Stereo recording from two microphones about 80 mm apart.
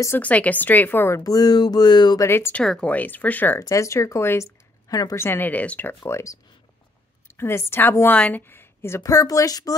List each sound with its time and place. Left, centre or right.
0.2 s a woman's voice: centre
1.2 s a sound: left
2.1 s speech: left
2.6 s speech: centre
2.9 s a woman's voice: left
3.5 s speech: left
4.8 s a woman's voice: left
5.2 s a woman's voice: left
6.0 s a woman's voice: left
9.0 s a woman's voice: left